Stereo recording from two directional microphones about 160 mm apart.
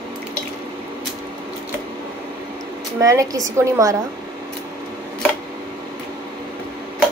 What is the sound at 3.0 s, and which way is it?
A woman's voice, 20° right (ahead or behind).